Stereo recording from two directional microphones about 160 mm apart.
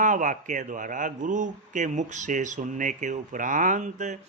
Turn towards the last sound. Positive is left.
turn(degrees=-50)  # may be behind; listen again after turning